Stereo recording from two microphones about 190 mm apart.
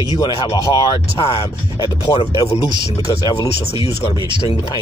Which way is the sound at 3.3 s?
30° left (ahead or behind).